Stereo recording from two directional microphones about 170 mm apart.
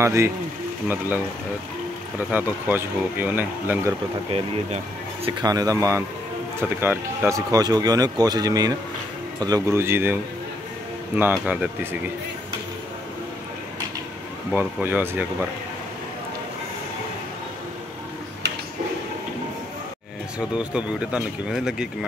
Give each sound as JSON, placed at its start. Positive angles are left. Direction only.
{"t": 0.0, "sound": "speech", "side_deg": -15}
{"t": 5.4, "sound": "speech", "side_deg": -20}
{"t": 11.1, "sound": "speech", "side_deg": -10}
{"t": 14.5, "sound": "speech", "side_deg": -10}
{"t": 20.3, "sound": "speech", "side_deg": -5}